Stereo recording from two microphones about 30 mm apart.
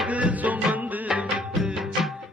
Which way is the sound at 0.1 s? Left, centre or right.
Right.